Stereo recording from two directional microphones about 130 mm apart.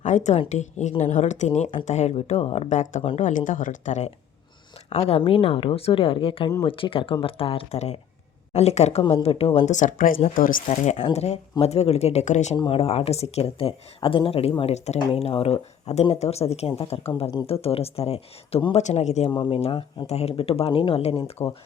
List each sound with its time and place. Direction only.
0.0 s a woman's voice: 65° left (ahead or behind)
4.9 s a woman's voice: 55° left (ahead or behind)
12.5 s speech: 45° left (ahead or behind)
19.3 s speech: 35° left (ahead or behind)
19.5 s speech: 50° left (ahead or behind)